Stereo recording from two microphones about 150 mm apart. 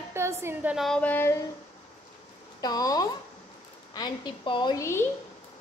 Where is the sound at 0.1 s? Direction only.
15° right (ahead or behind).